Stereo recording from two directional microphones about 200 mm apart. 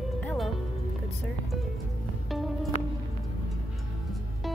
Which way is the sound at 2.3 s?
Centre (ahead or behind).